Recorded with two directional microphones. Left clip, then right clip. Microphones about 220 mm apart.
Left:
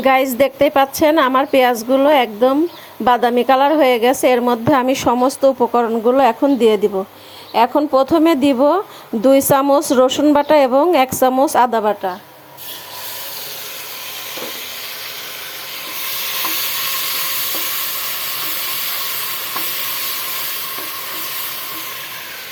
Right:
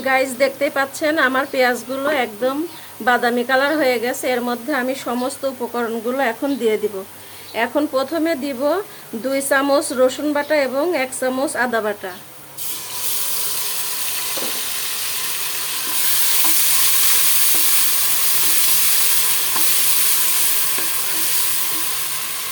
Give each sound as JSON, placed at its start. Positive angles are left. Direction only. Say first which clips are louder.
{"t": 0.0, "sound": "a woman's voice", "louder": "left 4 dB", "side_deg": 25}
{"t": 11.8, "sound": "speech", "louder": "left 6 dB", "side_deg": 15}